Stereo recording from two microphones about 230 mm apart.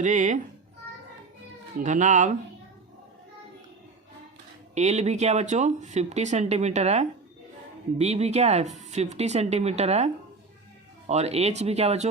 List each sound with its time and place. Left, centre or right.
0.0 s speech: right
1.8 s speech: right
4.7 s speech: right